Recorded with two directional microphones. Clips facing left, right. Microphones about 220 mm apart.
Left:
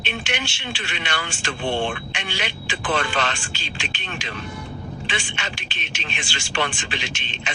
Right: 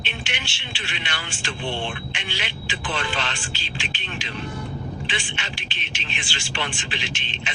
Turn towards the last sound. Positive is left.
turn(degrees=45)  # may be behind; listen again after turning